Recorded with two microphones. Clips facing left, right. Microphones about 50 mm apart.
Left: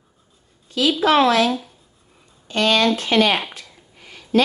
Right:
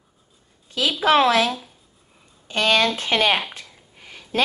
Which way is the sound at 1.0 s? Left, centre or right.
Centre.